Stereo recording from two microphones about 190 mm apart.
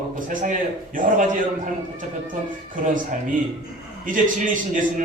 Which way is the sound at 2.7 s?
45° right (ahead or behind).